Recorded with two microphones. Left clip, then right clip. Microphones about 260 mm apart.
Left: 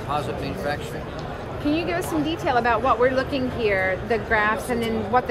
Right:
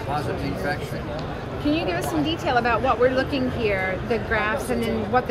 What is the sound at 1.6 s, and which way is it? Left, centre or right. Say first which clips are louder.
Speech: even; left.